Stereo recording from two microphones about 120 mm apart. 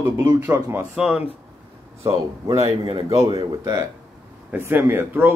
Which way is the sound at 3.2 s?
30° right (ahead or behind).